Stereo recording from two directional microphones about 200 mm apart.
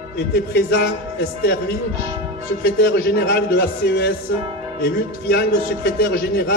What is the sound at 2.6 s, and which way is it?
A man's voice, 50° left (ahead or behind).